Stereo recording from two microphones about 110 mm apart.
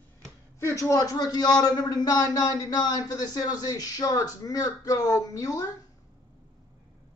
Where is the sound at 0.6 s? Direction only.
30° left (ahead or behind).